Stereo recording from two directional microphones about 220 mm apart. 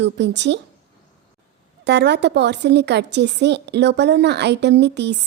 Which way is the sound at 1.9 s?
50° right (ahead or behind).